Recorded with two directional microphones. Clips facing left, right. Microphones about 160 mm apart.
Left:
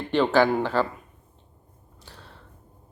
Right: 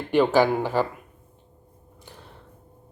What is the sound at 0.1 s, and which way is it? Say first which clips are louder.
Speech: right 1 dB; 10° right (ahead or behind).